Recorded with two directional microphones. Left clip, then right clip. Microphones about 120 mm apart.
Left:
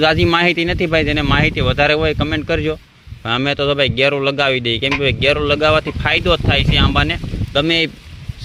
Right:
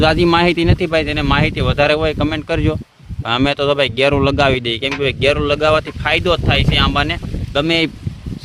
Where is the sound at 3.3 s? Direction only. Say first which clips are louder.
Right 1 dB; 55° right (ahead or behind).